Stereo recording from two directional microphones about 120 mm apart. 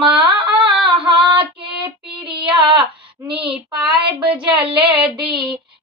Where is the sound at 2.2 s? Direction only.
45° right (ahead or behind).